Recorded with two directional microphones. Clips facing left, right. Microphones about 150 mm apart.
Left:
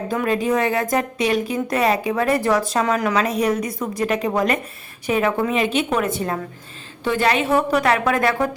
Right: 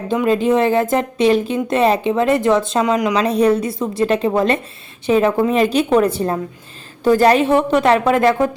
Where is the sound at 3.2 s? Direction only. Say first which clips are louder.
Right 5 dB; 30° right (ahead or behind).